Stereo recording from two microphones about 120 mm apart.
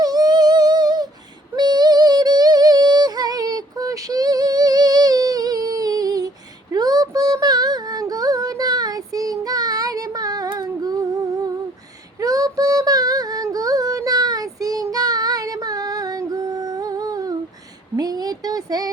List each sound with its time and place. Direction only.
0.0 s music: 35° right (ahead or behind)
12.2 s female singing: 30° right (ahead or behind)
17.9 s a sound: 35° right (ahead or behind)